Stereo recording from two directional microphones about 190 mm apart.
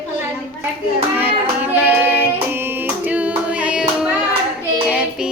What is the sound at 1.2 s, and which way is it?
Child singing, 10° right (ahead or behind).